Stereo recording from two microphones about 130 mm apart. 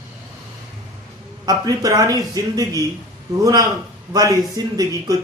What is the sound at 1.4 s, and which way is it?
Speech, 30° right (ahead or behind).